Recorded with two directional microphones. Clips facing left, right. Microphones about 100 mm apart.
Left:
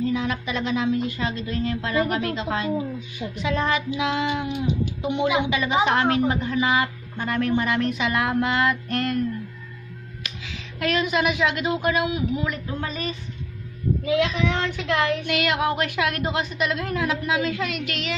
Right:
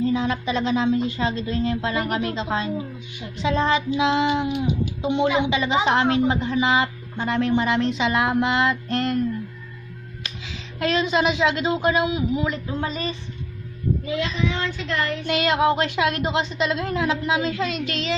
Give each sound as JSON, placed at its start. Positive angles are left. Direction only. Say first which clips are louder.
{"t": 0.0, "sound": "a woman's voice", "louder": "right 2 dB", "side_deg": -30}
{"t": 10.2, "sound": "a woman's voice", "louder": "right 1 dB", "side_deg": -30}
{"t": 14.0, "sound": "child singing", "louder": "left 5 dB", "side_deg": 75}
{"t": 15.2, "sound": "a woman's voice", "louder": "right 3 dB", "side_deg": -30}